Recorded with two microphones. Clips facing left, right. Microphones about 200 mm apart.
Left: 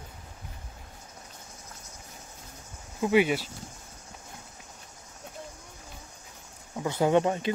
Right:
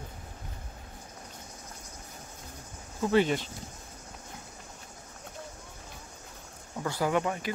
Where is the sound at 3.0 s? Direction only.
10° left (ahead or behind).